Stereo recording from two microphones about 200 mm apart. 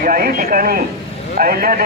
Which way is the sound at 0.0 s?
45° right (ahead or behind).